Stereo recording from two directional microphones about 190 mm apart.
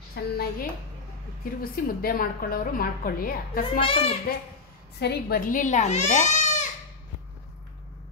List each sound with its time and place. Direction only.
0.1 s a woman's voice: 50° left (ahead or behind)
3.8 s a child's voice: 30° left (ahead or behind)
5.0 s speech: 55° left (ahead or behind); by 6.7 s 35° left (ahead or behind)